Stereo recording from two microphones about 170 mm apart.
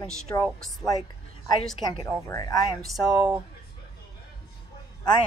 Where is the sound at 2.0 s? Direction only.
20° left (ahead or behind).